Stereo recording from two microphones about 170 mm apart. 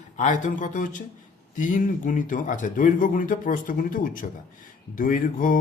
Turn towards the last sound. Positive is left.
turn(degrees=55)  # may be behind; listen again after turning